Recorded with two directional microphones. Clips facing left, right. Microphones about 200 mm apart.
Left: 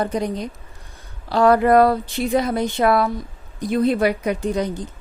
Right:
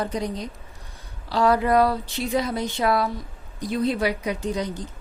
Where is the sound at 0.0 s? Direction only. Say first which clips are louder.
Left 4 dB; 55° left (ahead or behind).